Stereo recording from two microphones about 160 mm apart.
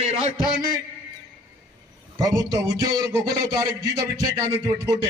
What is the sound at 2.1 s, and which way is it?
A man's voice, 25° right (ahead or behind).